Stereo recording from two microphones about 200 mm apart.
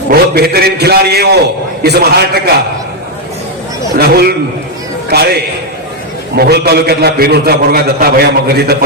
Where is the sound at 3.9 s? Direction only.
50° right (ahead or behind).